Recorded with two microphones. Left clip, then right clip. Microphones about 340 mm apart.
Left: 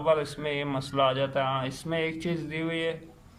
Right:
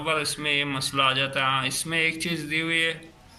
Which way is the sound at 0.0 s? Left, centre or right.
Left.